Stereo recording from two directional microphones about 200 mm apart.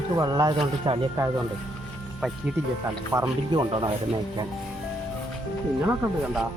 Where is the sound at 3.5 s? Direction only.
25° right (ahead or behind).